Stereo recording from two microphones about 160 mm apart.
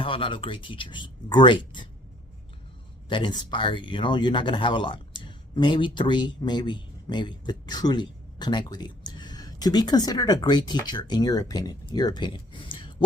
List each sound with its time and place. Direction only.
0.0 s speech: 30° left (ahead or behind)
3.1 s speech: 30° left (ahead or behind)